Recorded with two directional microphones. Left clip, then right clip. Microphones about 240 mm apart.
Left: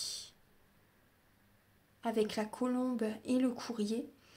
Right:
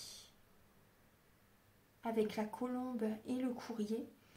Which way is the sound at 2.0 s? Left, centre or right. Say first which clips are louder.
Left 4 dB; left.